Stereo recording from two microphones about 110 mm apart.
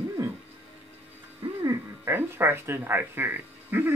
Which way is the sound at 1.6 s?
25° right (ahead or behind).